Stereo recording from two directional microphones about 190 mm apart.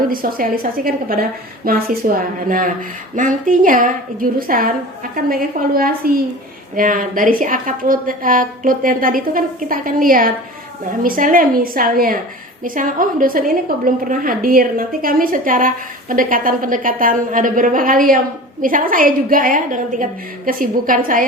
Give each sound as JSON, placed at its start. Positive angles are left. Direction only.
{"t": 0.1, "sound": "a woman's voice", "side_deg": -50}